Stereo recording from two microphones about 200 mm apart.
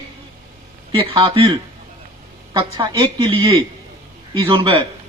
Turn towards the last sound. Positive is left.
turn(degrees=-25)  # may be behind; listen again after turning